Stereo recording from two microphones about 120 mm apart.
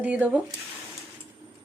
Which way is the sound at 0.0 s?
10° right (ahead or behind).